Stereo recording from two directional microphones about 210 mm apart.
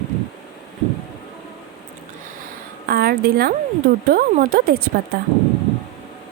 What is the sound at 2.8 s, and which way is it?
A woman's voice, 45° right (ahead or behind).